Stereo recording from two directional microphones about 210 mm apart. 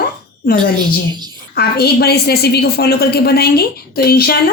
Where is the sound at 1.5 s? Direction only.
45° left (ahead or behind).